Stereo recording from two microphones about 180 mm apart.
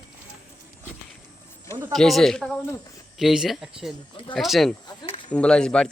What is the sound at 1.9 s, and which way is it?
Speech, centre (ahead or behind).